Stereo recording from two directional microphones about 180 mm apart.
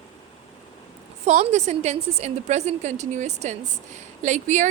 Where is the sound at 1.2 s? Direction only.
40° right (ahead or behind).